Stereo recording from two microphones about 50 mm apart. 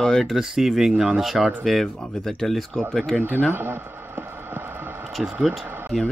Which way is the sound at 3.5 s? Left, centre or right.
Right.